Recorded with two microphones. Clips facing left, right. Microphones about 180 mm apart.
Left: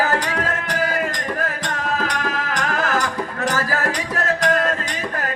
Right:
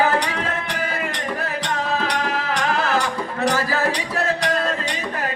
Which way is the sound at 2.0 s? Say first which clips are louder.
Right 1 dB; 45° left (ahead or behind).